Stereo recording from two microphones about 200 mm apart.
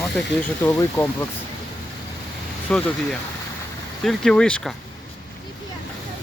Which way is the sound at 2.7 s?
5° left (ahead or behind).